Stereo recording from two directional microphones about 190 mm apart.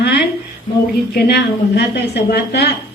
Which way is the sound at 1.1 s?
60° left (ahead or behind).